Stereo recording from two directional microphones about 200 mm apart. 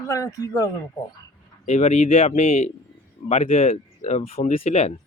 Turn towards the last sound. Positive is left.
turn(degrees=35)  # may be behind; listen again after turning